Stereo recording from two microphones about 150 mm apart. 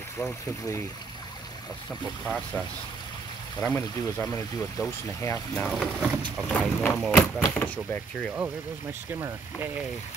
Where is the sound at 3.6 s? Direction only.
10° left (ahead or behind).